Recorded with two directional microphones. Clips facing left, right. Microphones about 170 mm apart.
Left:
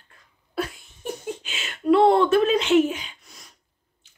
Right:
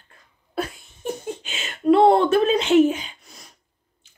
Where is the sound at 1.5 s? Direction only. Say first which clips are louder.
Right 2 dB; 35° right (ahead or behind).